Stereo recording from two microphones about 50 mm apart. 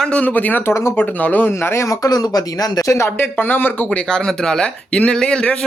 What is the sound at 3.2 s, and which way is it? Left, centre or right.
Speech, left.